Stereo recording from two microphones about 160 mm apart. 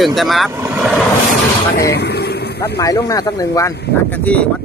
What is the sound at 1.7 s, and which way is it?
Vehicle, 85° left.